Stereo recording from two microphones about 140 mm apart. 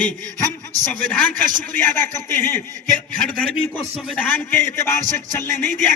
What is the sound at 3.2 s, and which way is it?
A man's voice, 5° left (ahead or behind).